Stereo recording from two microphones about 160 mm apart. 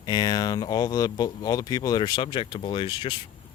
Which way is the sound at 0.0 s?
25° left (ahead or behind).